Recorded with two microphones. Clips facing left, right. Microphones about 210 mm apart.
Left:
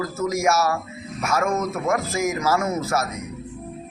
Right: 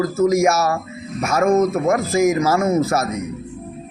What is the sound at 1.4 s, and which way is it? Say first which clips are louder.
Speech: right 11 dB; 35° right (ahead or behind).